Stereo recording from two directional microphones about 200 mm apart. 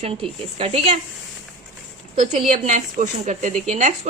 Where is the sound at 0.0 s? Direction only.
30° right (ahead or behind).